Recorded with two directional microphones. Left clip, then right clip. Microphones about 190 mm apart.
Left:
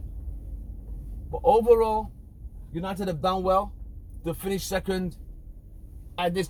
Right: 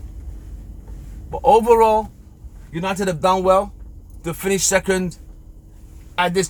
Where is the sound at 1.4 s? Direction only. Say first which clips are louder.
Right 7 dB; 35° right (ahead or behind).